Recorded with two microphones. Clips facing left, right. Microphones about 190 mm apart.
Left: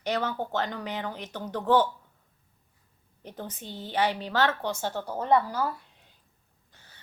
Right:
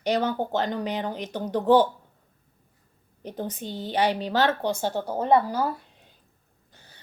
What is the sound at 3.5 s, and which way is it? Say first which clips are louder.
A woman's voice: right 2 dB; 15° right (ahead or behind).